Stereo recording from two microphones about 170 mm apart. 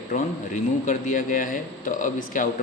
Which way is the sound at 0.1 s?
45° left (ahead or behind).